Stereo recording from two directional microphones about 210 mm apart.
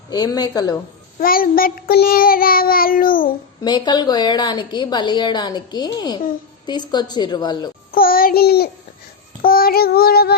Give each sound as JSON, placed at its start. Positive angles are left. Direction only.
{"t": 0.1, "sound": "a woman's voice", "side_deg": 20}
{"t": 1.2, "sound": "child singing", "side_deg": 45}
{"t": 3.6, "sound": "a woman's voice", "side_deg": 20}
{"t": 7.9, "sound": "child singing", "side_deg": 45}